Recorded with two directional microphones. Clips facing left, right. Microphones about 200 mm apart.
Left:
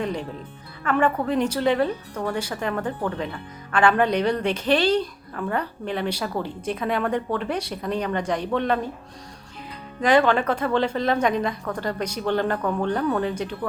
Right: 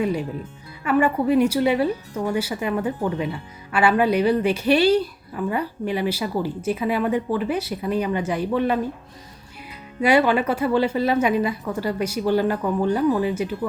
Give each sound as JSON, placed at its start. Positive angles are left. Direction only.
{"t": 0.0, "sound": "a woman's voice", "side_deg": -10}
{"t": 10.0, "sound": "a woman's voice", "side_deg": -10}